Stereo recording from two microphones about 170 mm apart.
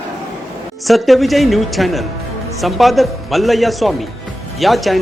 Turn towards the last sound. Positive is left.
turn(degrees=0)  # may be behind; listen again after turning